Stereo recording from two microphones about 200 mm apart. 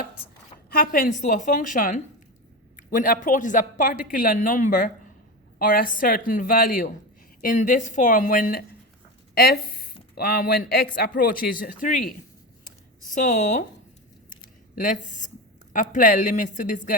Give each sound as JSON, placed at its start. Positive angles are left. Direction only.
{"t": 0.7, "sound": "speech", "side_deg": 45}
{"t": 14.8, "sound": "speech", "side_deg": 40}